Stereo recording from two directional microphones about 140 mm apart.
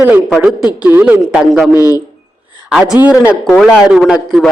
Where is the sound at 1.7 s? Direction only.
25° left (ahead or behind).